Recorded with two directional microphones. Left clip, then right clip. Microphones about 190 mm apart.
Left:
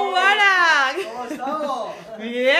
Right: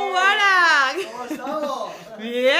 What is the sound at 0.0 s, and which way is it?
Children playing, 15° right (ahead or behind).